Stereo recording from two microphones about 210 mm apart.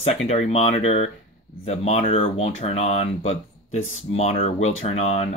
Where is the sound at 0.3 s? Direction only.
30° left (ahead or behind).